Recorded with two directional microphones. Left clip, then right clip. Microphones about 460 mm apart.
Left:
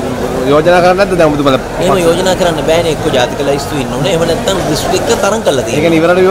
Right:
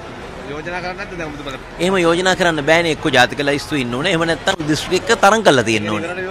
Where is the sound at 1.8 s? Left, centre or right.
Right.